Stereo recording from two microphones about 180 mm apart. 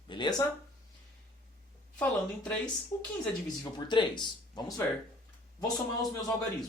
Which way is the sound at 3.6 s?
25° left (ahead or behind).